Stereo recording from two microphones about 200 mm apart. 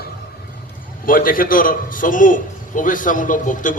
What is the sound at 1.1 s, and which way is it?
A man's voice, 45° left (ahead or behind).